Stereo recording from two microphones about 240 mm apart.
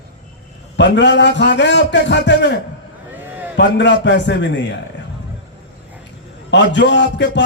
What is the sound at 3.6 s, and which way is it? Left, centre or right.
A man's voice, left.